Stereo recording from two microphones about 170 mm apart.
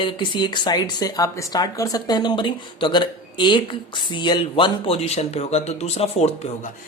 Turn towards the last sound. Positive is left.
turn(degrees=40)  # may be behind; listen again after turning